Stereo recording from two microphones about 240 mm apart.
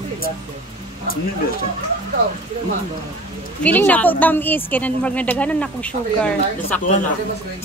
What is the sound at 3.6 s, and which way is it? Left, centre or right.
A woman's voice, centre.